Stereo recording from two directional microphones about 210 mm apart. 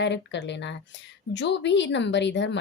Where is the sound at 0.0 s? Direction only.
55° left (ahead or behind).